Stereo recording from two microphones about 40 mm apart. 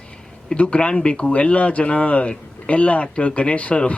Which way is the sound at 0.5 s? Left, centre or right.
Left.